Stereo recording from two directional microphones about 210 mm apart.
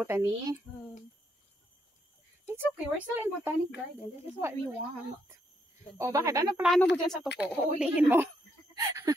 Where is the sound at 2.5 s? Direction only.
10° right (ahead or behind).